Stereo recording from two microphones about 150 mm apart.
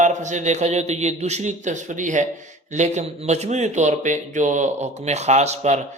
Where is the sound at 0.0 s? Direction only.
55° right (ahead or behind).